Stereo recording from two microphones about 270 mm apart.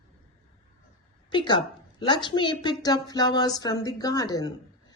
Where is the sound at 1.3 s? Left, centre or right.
Centre.